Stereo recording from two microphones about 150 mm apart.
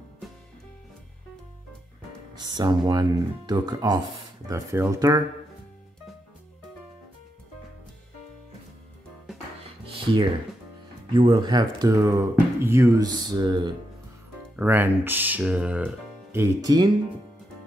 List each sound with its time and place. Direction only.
2.3 s speech: 30° right (ahead or behind)
9.8 s music: 35° right (ahead or behind)
11.1 s speech: 35° right (ahead or behind)
14.6 s speech: 15° right (ahead or behind)